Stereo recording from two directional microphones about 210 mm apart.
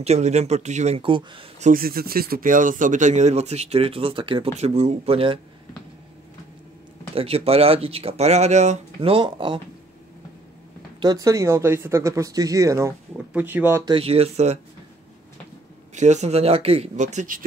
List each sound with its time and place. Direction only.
0.0 s speech: 30° right (ahead or behind)
1.7 s speech: 45° right (ahead or behind); by 5.4 s 25° right (ahead or behind)
7.2 s speech: 30° right (ahead or behind)
11.0 s speech: 20° right (ahead or behind)
13.9 s speech: 25° right (ahead or behind)
15.9 s speech: 35° right (ahead or behind)